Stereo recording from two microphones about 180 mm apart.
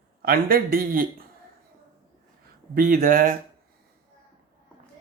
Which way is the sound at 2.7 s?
50° right (ahead or behind).